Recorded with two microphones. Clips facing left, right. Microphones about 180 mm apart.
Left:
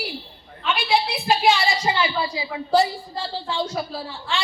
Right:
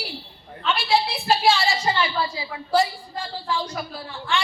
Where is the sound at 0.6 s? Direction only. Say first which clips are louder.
Even; 10° left (ahead or behind).